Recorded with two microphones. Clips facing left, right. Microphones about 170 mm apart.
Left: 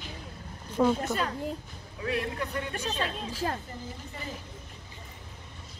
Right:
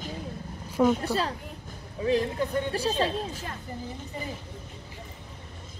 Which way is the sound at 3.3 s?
35° left (ahead or behind).